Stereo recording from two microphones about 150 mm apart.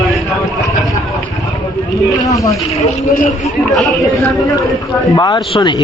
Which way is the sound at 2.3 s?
20° left (ahead or behind).